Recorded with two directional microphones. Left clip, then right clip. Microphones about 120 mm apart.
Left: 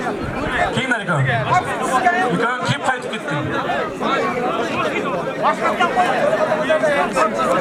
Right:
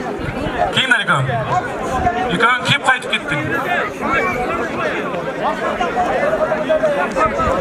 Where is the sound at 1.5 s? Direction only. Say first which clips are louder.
Left 3 dB; 45° left (ahead or behind).